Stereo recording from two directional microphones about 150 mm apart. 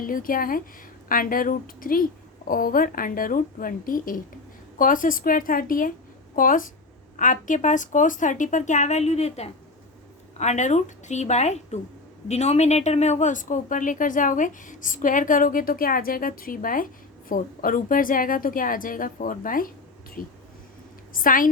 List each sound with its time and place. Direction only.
0.0 s a woman's voice: 70° left (ahead or behind)